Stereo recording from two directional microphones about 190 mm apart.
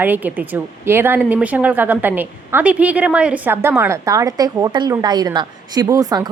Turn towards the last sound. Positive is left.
turn(degrees=-20)  # may be behind; listen again after turning